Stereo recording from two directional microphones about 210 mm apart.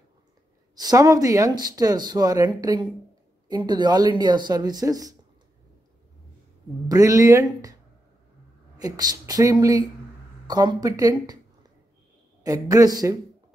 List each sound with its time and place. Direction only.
0.7 s speech: 15° right (ahead or behind)
6.9 s speech: 15° right (ahead or behind)
8.7 s speech: 20° right (ahead or behind)
12.4 s speech: 15° right (ahead or behind)